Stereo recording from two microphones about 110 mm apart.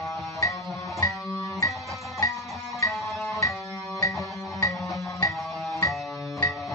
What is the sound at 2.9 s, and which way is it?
Music, centre (ahead or behind).